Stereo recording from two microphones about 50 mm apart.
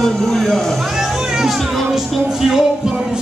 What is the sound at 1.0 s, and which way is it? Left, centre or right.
Speech, centre.